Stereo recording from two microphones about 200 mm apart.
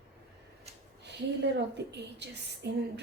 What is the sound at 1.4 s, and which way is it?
A woman's voice, 60° right (ahead or behind).